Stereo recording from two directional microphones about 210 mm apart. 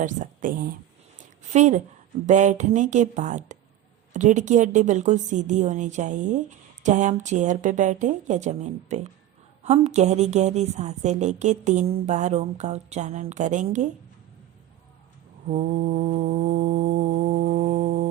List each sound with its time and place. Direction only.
0.0 s a woman's voice: 40° right (ahead or behind)
15.4 s a woman's voice: 35° right (ahead or behind)